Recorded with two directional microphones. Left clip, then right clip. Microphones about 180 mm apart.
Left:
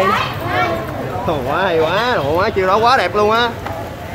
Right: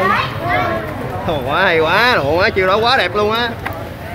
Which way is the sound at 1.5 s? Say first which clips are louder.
Right 3 dB; 5° left (ahead or behind).